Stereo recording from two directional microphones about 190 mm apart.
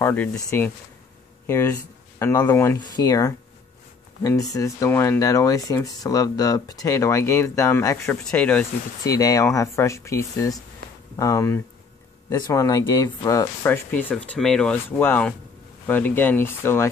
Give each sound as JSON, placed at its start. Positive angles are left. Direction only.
{"t": 0.0, "sound": "speech", "side_deg": 10}
{"t": 9.0, "sound": "speech", "side_deg": 20}